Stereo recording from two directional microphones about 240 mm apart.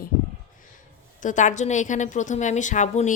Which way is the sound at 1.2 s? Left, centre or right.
Left.